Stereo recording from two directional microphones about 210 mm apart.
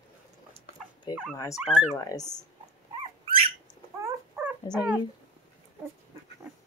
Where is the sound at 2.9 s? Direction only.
25° right (ahead or behind).